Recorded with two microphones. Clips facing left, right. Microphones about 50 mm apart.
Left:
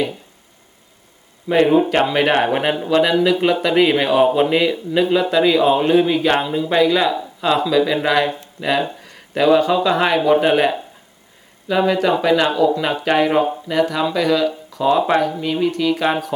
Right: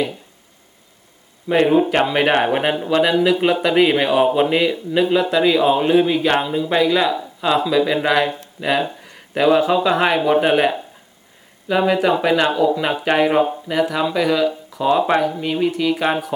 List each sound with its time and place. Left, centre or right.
1.5 s speech: centre